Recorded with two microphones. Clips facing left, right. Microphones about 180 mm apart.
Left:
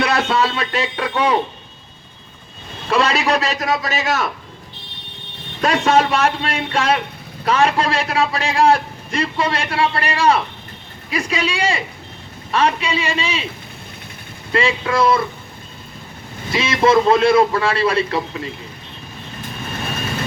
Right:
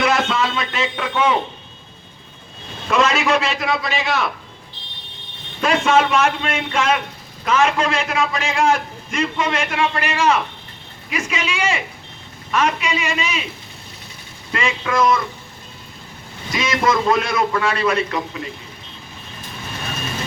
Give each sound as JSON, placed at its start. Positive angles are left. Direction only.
{"t": 0.0, "sound": "music", "side_deg": 35}
{"t": 2.9, "sound": "a man's voice", "side_deg": 35}
{"t": 5.6, "sound": "a man's voice", "side_deg": 40}
{"t": 14.5, "sound": "a man's voice", "side_deg": 30}
{"t": 16.5, "sound": "a man's voice", "side_deg": 30}